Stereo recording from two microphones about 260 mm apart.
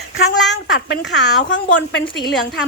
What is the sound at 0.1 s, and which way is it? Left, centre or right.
Speech, left.